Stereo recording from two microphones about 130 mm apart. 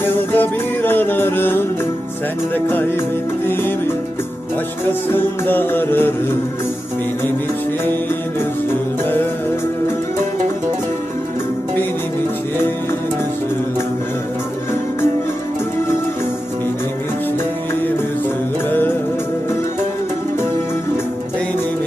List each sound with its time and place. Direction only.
0.0 s music: 15° left (ahead or behind)
3.4 s music: 15° left (ahead or behind)
18.7 s music: 15° left (ahead or behind)